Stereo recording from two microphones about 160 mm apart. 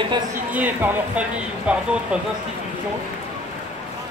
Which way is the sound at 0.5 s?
10° right (ahead or behind).